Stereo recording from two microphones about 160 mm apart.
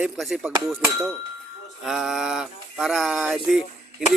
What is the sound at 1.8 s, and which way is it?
Speech, centre (ahead or behind).